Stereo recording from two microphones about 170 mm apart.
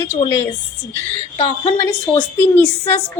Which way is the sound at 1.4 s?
35° left (ahead or behind).